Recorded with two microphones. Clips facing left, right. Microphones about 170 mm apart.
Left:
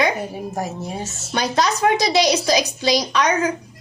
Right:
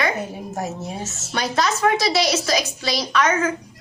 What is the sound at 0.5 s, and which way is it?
Speech, 5° right (ahead or behind).